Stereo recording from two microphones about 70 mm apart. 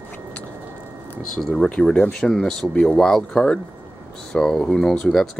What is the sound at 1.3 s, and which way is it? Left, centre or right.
Speech, centre.